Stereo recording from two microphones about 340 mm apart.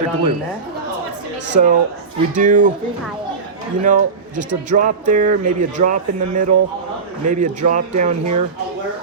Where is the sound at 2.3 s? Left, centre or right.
Right.